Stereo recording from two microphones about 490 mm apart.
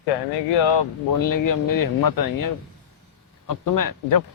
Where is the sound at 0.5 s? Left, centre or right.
Left.